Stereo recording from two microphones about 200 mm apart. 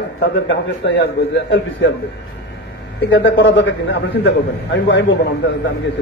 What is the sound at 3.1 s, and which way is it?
A man's voice, 70° left (ahead or behind).